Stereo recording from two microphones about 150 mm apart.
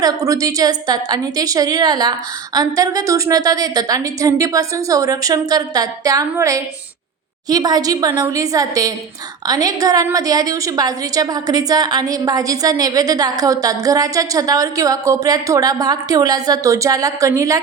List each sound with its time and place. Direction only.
0.0 s a woman's voice: 20° right (ahead or behind)